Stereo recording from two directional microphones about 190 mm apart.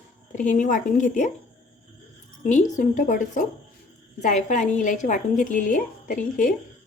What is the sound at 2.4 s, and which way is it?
Speech, 40° left (ahead or behind).